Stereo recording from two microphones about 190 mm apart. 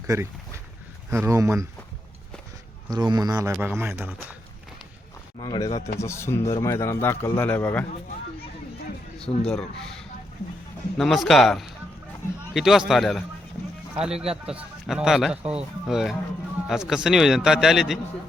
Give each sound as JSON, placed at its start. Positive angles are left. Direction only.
{"t": 0.1, "sound": "speech", "side_deg": -20}
{"t": 2.9, "sound": "speech", "side_deg": -20}
{"t": 5.4, "sound": "a man's voice", "side_deg": 20}
{"t": 9.5, "sound": "a man's voice", "side_deg": 5}